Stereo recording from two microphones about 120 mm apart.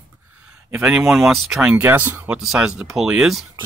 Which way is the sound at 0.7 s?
10° right (ahead or behind).